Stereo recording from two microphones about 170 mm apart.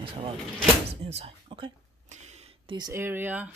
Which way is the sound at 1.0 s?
40° right (ahead or behind).